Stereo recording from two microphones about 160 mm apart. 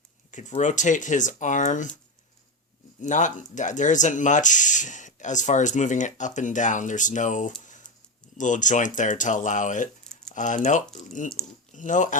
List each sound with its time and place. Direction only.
0.3 s speech: 50° left (ahead or behind)
3.0 s speech: 50° left (ahead or behind)